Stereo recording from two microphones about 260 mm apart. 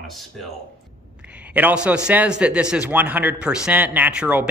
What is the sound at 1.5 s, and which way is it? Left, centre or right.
A man's voice, centre.